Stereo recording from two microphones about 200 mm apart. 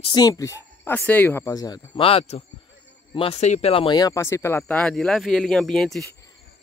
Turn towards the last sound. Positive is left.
turn(degrees=0)  # may be behind; listen again after turning